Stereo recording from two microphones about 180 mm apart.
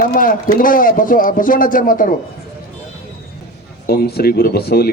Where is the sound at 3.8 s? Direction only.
60° left (ahead or behind).